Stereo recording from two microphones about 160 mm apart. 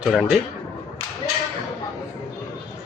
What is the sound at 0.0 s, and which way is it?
Speech, centre (ahead or behind).